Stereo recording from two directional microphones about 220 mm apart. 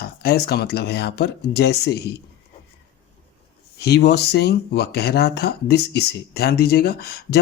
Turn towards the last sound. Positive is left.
turn(degrees=45)  # may be behind; listen again after turning